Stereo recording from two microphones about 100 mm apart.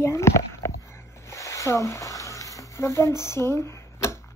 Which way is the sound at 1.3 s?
30° left (ahead or behind).